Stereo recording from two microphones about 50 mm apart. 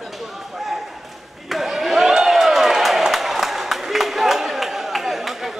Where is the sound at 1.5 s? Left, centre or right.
Centre.